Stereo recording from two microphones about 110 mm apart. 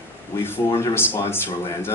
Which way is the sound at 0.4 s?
20° left (ahead or behind).